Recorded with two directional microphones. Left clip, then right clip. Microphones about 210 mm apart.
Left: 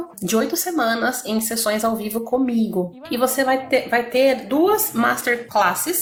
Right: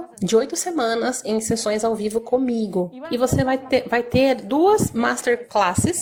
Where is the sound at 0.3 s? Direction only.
40° right (ahead or behind).